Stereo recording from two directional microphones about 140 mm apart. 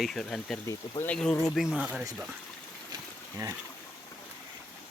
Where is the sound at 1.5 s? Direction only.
5° right (ahead or behind).